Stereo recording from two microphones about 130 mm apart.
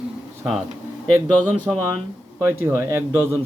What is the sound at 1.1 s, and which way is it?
Speech, 20° right (ahead or behind).